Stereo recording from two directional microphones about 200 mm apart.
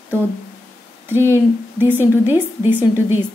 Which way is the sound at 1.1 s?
10° right (ahead or behind).